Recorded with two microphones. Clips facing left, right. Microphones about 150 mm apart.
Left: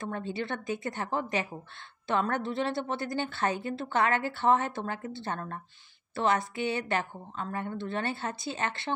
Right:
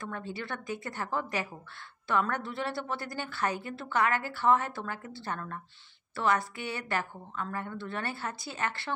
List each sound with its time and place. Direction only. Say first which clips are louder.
0.0 s a woman's voice: left 4 dB; 25° left (ahead or behind)